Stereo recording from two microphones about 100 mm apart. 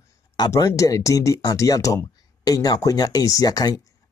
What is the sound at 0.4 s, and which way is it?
Speech, 40° left (ahead or behind).